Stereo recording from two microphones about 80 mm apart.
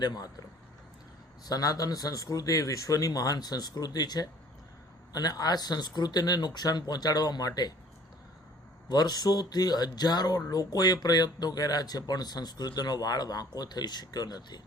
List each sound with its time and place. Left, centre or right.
0.0 s speech: left
1.5 s speech: left
8.9 s speech: left